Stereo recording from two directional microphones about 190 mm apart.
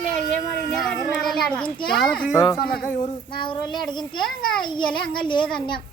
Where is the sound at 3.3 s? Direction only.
25° left (ahead or behind).